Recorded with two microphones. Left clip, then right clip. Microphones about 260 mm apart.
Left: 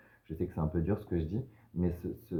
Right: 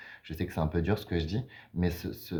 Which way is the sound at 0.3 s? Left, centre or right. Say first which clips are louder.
Right 3 dB; right.